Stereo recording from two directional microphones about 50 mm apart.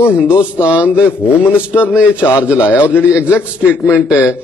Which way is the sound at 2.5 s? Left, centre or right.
Left.